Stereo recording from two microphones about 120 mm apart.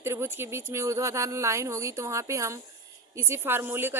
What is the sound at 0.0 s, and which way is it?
Speech, 20° right (ahead or behind).